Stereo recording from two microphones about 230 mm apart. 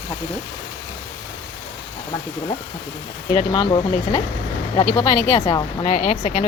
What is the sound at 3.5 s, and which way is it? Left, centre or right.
A woman's voice, centre.